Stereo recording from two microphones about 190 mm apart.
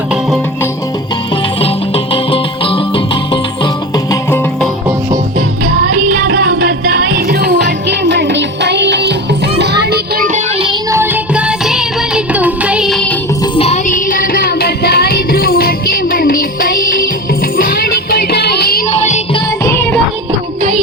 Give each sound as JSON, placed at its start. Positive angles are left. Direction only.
{"t": 2.1, "sound": "music", "side_deg": 30}
{"t": 6.1, "sound": "music", "side_deg": -55}
{"t": 10.9, "sound": "music", "side_deg": -10}
{"t": 13.4, "sound": "music", "side_deg": 35}
{"t": 18.9, "sound": "music", "side_deg": 35}
{"t": 19.6, "sound": "music", "side_deg": 10}